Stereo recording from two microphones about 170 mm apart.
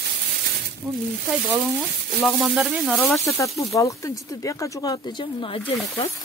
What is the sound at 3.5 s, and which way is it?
Speech, 20° left (ahead or behind).